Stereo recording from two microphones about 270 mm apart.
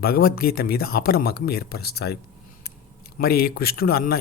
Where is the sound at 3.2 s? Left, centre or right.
Left.